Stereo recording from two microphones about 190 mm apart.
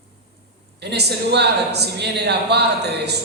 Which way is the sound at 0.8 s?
60° right (ahead or behind).